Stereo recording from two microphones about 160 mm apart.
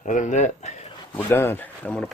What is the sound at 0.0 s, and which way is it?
Speech, 50° left (ahead or behind).